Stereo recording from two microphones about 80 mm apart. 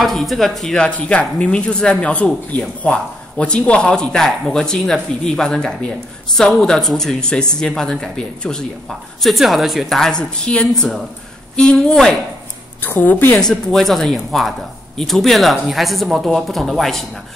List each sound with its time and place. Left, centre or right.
0.0 s speech: centre
12.8 s a woman's voice: left
13.4 s speech: centre